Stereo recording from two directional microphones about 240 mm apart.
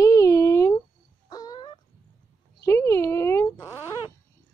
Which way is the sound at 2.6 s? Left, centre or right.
Centre.